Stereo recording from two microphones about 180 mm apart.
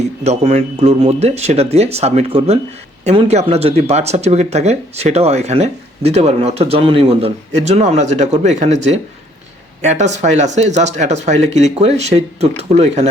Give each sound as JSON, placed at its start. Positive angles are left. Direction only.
{"t": 0.3, "sound": "speech", "side_deg": -35}